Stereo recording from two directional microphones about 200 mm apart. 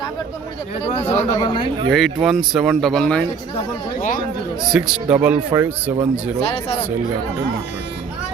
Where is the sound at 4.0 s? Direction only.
40° left (ahead or behind).